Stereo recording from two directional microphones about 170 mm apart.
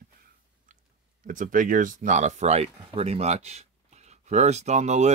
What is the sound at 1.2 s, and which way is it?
Speech, 50° right (ahead or behind).